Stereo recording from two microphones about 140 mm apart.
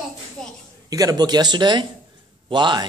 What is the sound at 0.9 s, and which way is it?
Speech, 25° right (ahead or behind).